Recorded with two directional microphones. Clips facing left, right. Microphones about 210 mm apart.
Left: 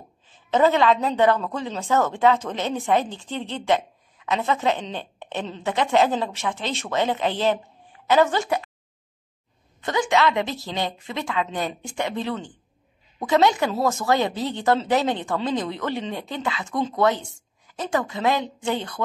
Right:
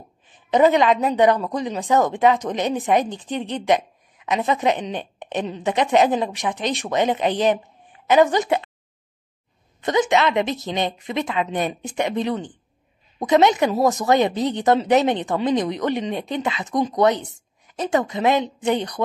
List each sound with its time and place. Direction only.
0.3 s a woman's voice: 15° right (ahead or behind)
9.8 s a woman's voice: 20° right (ahead or behind)